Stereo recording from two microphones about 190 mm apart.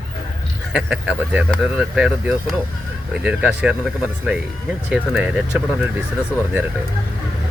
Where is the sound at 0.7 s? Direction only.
5° right (ahead or behind).